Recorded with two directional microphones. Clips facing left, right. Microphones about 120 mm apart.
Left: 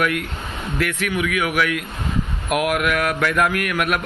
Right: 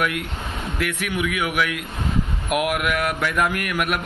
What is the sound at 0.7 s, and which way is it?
A man's voice, 10° right (ahead or behind).